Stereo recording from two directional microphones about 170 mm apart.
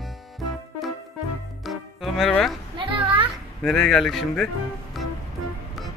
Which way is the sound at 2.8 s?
30° right (ahead or behind).